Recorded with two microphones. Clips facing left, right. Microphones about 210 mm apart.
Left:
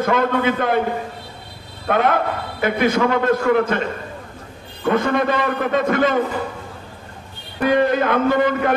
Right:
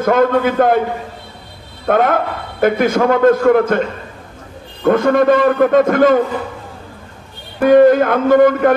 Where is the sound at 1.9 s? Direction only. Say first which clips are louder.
Right 4 dB; 50° right (ahead or behind).